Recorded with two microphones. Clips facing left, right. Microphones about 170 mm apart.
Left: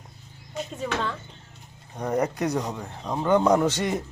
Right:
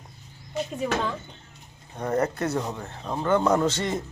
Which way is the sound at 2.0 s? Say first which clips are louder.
Even; 10° left (ahead or behind).